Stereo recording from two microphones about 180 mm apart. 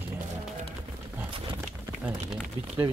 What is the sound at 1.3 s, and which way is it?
Horse, 25° right (ahead or behind).